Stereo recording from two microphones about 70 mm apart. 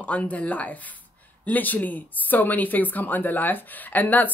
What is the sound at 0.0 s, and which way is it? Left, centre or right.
Speech, centre.